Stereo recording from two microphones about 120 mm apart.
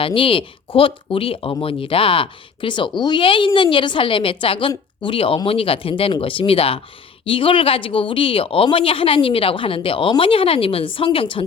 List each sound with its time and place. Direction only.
0.0 s speech: 50° left (ahead or behind)